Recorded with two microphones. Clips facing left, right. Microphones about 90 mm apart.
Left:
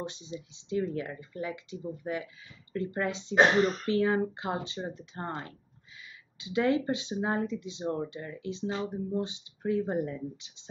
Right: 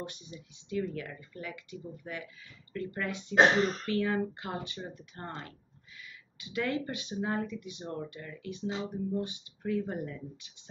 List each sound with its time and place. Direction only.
0.0 s speech: 20° left (ahead or behind)
3.3 s speech: 5° left (ahead or behind)
3.8 s speech: 20° left (ahead or behind)
8.6 s speech: 20° right (ahead or behind)
8.9 s speech: 20° left (ahead or behind)